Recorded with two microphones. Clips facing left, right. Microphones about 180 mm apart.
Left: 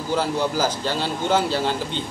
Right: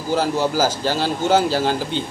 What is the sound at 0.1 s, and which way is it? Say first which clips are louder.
Speech: right 3 dB; 40° right (ahead or behind).